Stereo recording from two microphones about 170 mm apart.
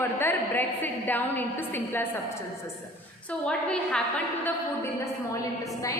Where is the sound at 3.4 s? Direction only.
5° left (ahead or behind).